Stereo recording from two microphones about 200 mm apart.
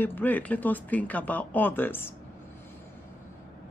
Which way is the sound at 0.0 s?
10° left (ahead or behind).